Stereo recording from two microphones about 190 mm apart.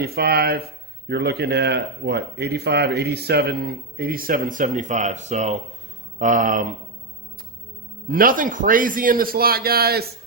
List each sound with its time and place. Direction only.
0.0 s speech: 55° right (ahead or behind)
8.0 s speech: 50° right (ahead or behind)